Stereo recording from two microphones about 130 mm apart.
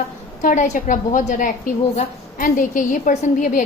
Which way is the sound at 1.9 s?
90° left.